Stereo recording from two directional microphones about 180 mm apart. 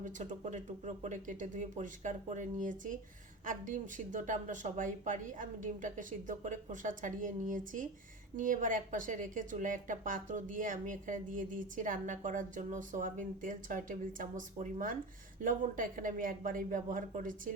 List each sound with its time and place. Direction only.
0.0 s speech: 45° right (ahead or behind)